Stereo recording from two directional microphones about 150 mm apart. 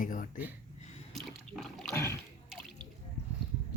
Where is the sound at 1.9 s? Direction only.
20° left (ahead or behind).